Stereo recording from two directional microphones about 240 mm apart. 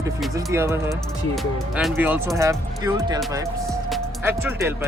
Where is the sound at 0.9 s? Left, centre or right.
Centre.